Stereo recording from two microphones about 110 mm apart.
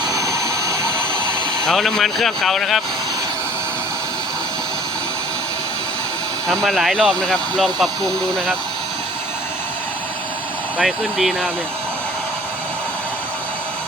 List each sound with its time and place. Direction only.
0.0 s jet engine: 30° right (ahead or behind)
1.6 s speech: centre (ahead or behind)
6.7 s speech: centre (ahead or behind)
10.8 s speech: centre (ahead or behind)